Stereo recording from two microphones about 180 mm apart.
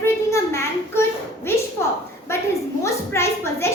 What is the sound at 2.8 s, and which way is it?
Speech, 15° left (ahead or behind).